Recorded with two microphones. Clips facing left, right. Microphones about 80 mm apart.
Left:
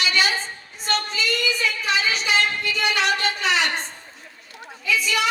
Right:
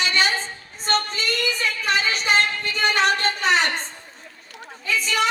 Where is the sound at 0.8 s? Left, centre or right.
Right.